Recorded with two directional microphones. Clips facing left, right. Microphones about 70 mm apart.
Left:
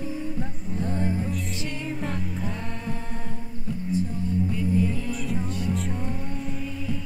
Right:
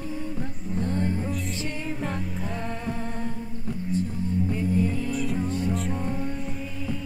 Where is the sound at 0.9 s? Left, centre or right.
Centre.